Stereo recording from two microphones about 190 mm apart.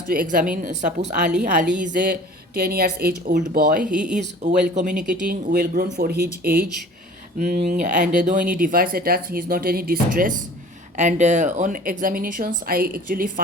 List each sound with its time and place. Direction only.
0.1 s speech: 45° right (ahead or behind)
1.3 s a woman's voice: 5° right (ahead or behind)
1.9 s speech: 45° right (ahead or behind)
3.9 s a woman's voice: 5° right (ahead or behind)
4.7 s speech: 40° right (ahead or behind)